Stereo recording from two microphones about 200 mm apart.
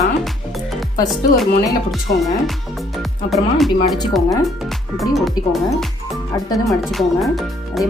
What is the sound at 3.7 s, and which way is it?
Speech, 20° left (ahead or behind).